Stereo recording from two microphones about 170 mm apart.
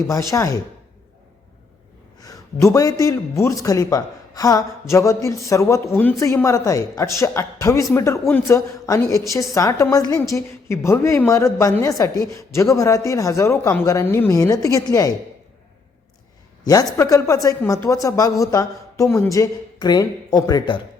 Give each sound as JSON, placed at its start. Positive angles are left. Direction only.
{"t": 0.1, "sound": "speech", "side_deg": 20}
{"t": 2.2, "sound": "a man's voice", "side_deg": 20}
{"t": 16.6, "sound": "speech", "side_deg": 20}